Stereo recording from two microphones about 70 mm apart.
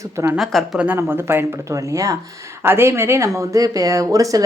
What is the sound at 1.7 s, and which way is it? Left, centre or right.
Speech, right.